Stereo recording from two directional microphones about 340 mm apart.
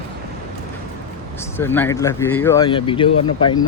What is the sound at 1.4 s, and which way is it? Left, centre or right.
Speech, centre.